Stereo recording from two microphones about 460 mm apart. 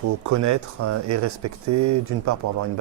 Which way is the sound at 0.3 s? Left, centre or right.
Right.